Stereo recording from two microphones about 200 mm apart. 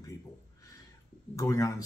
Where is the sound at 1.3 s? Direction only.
15° left (ahead or behind).